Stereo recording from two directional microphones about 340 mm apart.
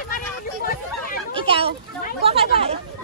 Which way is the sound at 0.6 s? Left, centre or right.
Left.